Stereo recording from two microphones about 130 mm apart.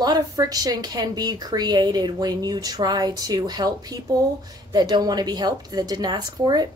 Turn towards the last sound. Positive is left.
turn(degrees=-30)  # may be behind; listen again after turning